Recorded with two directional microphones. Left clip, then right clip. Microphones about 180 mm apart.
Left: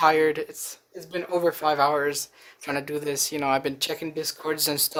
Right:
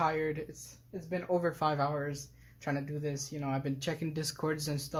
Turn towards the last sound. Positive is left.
turn(degrees=20)  # may be behind; listen again after turning